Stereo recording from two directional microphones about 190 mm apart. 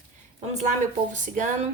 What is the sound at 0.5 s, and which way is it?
Speech, 40° right (ahead or behind).